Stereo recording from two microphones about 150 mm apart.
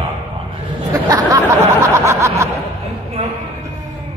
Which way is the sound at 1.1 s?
20° right (ahead or behind).